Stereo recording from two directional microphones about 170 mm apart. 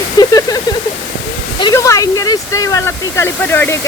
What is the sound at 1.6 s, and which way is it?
Speech, 20° left (ahead or behind).